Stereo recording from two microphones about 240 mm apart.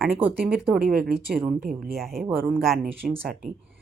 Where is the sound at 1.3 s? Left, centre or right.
Centre.